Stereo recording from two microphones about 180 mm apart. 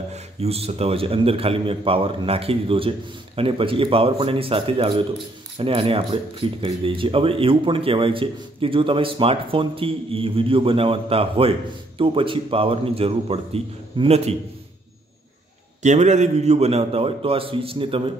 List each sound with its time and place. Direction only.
0.1 s speech: 35° right (ahead or behind)
15.8 s speech: 40° right (ahead or behind)